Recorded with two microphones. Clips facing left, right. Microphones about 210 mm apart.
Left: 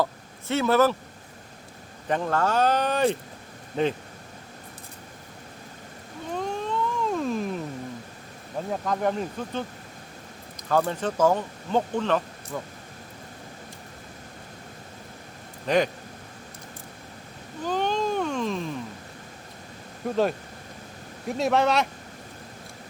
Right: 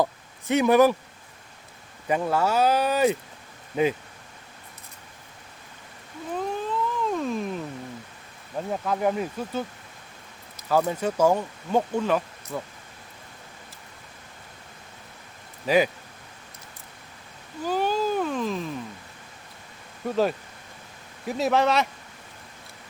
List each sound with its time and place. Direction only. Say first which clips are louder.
0.0 s speech: right 2 dB; 15° right (ahead or behind)
2.0 s speech: right 1 dB; 10° right (ahead or behind)
6.3 s a sound: even; 5° right (ahead or behind)
8.7 s a man's voice: right 1 dB; 5° right (ahead or behind)
15.6 s a man's voice: right 1 dB; 5° right (ahead or behind)
17.7 s a sound: right 1 dB; 5° right (ahead or behind)
20.1 s a man's voice: even; centre (ahead or behind)